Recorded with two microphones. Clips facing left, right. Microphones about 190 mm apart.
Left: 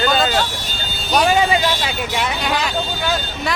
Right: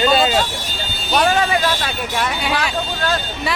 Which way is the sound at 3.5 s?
5° right (ahead or behind).